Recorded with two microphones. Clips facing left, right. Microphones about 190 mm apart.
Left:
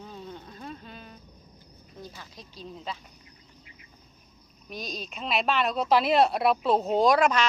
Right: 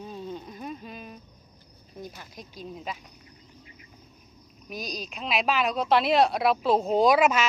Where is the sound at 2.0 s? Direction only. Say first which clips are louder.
Right 3 dB; 15° right (ahead or behind).